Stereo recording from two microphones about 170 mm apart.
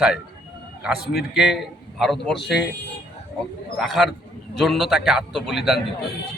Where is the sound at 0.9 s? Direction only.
70° left (ahead or behind).